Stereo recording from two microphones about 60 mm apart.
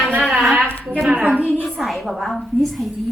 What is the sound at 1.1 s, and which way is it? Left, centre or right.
Speech, right.